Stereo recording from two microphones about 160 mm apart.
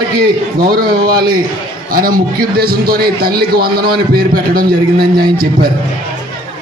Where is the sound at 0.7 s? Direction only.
65° right (ahead or behind).